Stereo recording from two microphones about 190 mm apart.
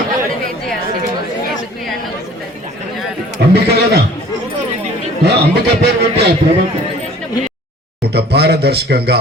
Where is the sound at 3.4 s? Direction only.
60° right (ahead or behind).